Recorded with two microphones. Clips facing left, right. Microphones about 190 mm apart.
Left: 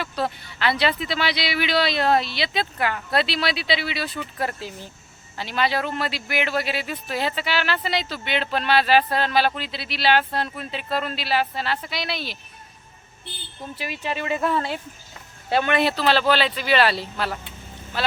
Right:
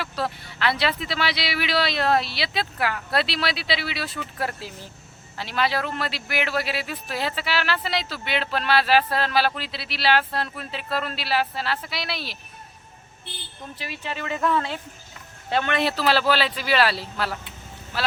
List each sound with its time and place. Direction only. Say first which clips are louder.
0.0 s speech: left 2 dB; centre (ahead or behind)
13.7 s speech: left 4 dB; 15° left (ahead or behind)
14.4 s speech: right 2 dB; 30° left (ahead or behind)
15.4 s speech: left 3 dB; 10° left (ahead or behind)